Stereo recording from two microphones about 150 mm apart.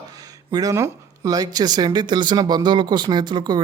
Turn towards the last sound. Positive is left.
turn(degrees=-30)  # may be behind; listen again after turning